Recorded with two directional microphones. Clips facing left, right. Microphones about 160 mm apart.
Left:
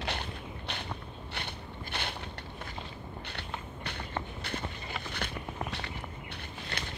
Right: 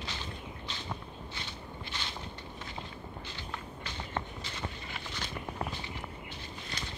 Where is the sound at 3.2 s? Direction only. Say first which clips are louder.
Left 1 dB; 65° left (ahead or behind).